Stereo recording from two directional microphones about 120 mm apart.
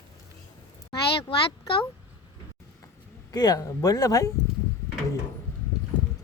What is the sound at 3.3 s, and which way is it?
Speech, 30° left (ahead or behind).